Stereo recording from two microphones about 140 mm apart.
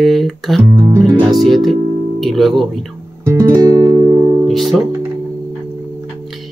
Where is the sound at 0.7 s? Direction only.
20° right (ahead or behind).